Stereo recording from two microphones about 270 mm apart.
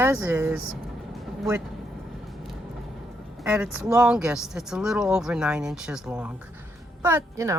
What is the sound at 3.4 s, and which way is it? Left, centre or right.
A woman's voice, centre.